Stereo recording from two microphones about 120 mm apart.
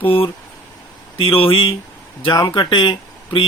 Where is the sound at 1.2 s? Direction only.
50° left (ahead or behind).